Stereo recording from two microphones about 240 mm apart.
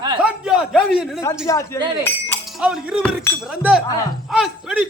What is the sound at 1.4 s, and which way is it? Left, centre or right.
Speech, centre.